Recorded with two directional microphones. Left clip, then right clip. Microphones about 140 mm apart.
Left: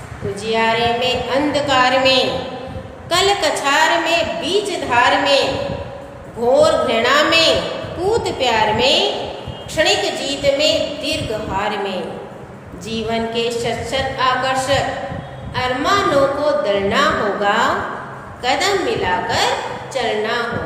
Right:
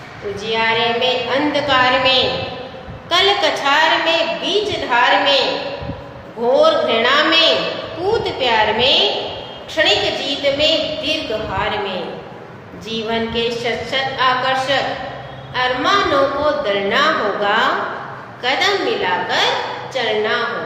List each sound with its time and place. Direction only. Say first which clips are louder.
0.4 s a woman's voice: even; 25° left (ahead or behind)
6.5 s a woman's voice: even; 30° left (ahead or behind)